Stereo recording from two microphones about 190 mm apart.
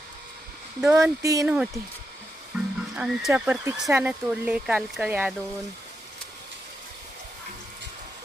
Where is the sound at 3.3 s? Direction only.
10° right (ahead or behind).